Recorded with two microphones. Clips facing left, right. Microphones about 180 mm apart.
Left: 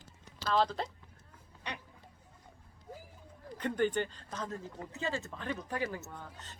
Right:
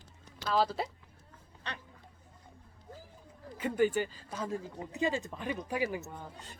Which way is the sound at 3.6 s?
5° right (ahead or behind).